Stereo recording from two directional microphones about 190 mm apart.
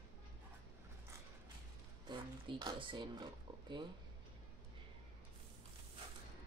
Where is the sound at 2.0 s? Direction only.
25° right (ahead or behind).